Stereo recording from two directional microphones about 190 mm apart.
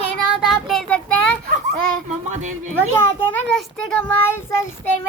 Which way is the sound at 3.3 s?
5° left (ahead or behind).